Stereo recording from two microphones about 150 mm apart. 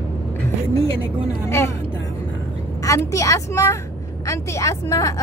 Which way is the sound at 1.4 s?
15° left (ahead or behind).